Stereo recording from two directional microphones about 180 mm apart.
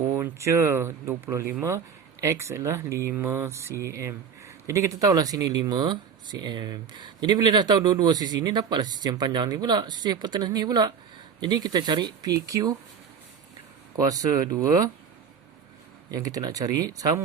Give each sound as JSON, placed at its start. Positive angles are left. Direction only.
{"t": 0.1, "sound": "speech", "side_deg": -15}
{"t": 13.9, "sound": "speech", "side_deg": -20}
{"t": 16.1, "sound": "speech", "side_deg": -20}